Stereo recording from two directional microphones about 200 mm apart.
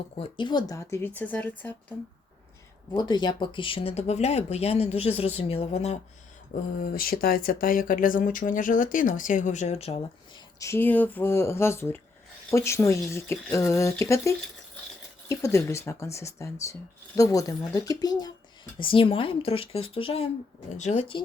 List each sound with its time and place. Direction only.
0.2 s speech: 25° left (ahead or behind); by 1.7 s 10° left (ahead or behind)
2.9 s speech: 20° left (ahead or behind)
6.8 s speech: 45° left (ahead or behind); by 10.0 s 30° left (ahead or behind)
10.6 s speech: 10° left (ahead or behind); by 21.2 s 30° left (ahead or behind)